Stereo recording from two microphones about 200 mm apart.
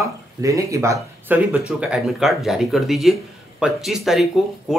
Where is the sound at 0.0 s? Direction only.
15° right (ahead or behind).